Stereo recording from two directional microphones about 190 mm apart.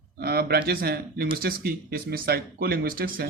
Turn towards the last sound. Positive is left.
turn(degrees=-50)  # may be behind; listen again after turning